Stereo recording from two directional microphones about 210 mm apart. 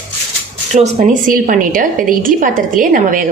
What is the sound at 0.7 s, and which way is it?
A woman's voice, 35° right (ahead or behind).